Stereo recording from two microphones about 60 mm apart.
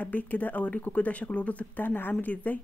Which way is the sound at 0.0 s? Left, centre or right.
Left.